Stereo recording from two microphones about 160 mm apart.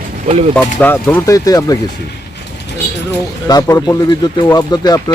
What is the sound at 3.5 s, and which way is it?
A man's voice, 25° left (ahead or behind).